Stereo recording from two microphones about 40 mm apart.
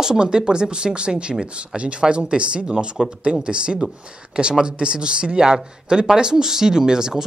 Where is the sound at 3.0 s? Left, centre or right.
Centre.